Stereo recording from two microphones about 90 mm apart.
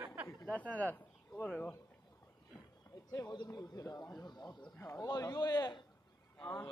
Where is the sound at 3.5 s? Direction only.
35° left (ahead or behind).